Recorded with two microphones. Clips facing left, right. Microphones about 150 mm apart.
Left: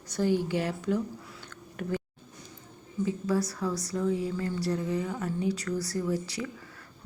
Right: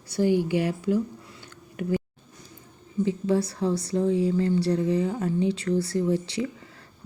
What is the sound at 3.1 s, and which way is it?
Speech, 25° right (ahead or behind).